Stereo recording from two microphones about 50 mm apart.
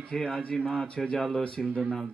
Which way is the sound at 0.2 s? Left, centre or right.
Left.